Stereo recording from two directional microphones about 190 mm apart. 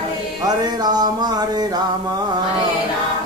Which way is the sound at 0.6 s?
20° right (ahead or behind).